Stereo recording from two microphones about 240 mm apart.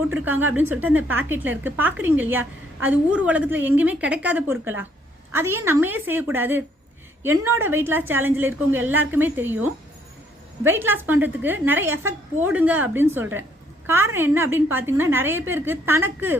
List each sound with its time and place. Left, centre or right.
0.1 s a woman's voice: centre
7.6 s a woman's voice: centre